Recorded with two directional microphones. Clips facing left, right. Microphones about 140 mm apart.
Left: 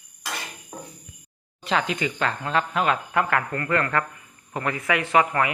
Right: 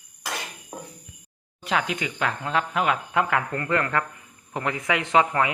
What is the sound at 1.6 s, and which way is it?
Speech, 10° right (ahead or behind).